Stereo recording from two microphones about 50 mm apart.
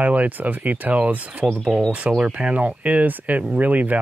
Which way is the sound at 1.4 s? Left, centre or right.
Centre.